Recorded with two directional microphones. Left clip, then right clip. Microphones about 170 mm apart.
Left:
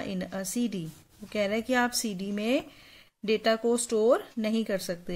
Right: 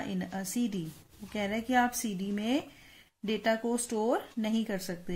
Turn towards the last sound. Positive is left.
turn(degrees=45)  # may be behind; listen again after turning